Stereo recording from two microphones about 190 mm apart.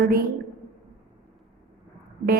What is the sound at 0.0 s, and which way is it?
Mantra, 55° right (ahead or behind).